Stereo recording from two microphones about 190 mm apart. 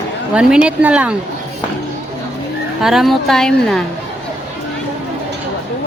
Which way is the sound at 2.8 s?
Centre (ahead or behind).